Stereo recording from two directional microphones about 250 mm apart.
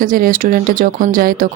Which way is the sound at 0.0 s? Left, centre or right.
Right.